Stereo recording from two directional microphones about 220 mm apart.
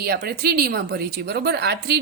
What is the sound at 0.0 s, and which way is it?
A woman's voice, 45° right (ahead or behind).